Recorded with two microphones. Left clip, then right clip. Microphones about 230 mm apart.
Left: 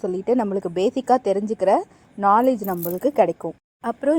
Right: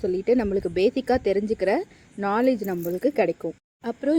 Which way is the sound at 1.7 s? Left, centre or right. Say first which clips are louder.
Left 6 dB; left.